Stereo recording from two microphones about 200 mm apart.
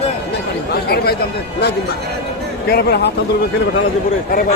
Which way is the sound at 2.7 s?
50° left (ahead or behind).